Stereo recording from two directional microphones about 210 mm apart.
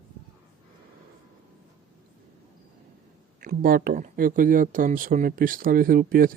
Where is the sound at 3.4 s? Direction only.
40° right (ahead or behind).